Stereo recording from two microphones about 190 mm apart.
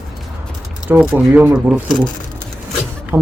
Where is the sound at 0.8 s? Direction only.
10° right (ahead or behind).